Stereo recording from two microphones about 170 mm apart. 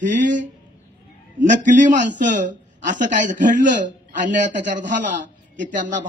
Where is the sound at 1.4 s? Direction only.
45° right (ahead or behind).